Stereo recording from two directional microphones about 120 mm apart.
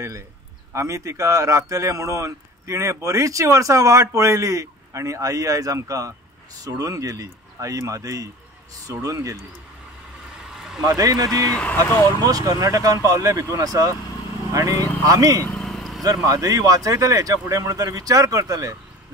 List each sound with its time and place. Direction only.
0.7 s speech: 25° right (ahead or behind)
10.5 s a sound: 5° right (ahead or behind)
10.8 s speech: 30° right (ahead or behind)
11.5 s speech: 10° left (ahead or behind)
12.2 s speech: 30° right (ahead or behind)
15.5 s vehicle: 5° left (ahead or behind)
16.3 s speech: 30° right (ahead or behind)